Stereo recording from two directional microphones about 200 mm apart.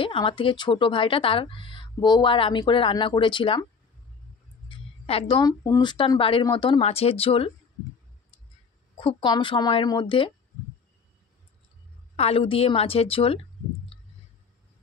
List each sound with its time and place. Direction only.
0.0 s speech: 25° left (ahead or behind)
4.6 s a sound: 30° left (ahead or behind)
5.4 s speech: 20° left (ahead or behind)
8.9 s speech: 25° left (ahead or behind)
12.2 s speech: 30° left (ahead or behind)